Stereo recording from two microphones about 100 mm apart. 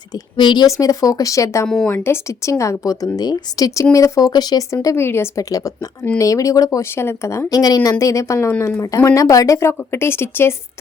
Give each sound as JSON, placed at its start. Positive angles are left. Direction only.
{"t": 0.3, "sound": "speech", "side_deg": 50}
{"t": 0.7, "sound": "speech", "side_deg": 35}
{"t": 1.6, "sound": "speech", "side_deg": 5}
{"t": 1.9, "sound": "speech", "side_deg": 25}
{"t": 5.5, "sound": "speech", "side_deg": 35}
{"t": 9.0, "sound": "speech", "side_deg": 35}